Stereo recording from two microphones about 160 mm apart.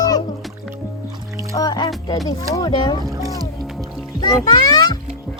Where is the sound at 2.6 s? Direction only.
25° left (ahead or behind).